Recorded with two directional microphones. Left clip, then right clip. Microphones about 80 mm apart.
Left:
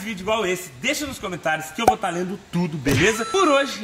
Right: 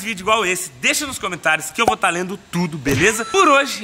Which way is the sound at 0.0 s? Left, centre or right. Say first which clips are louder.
Right 5 dB; centre.